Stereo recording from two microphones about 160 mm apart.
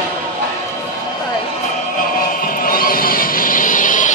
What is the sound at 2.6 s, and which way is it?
Vehicle, 65° left (ahead or behind).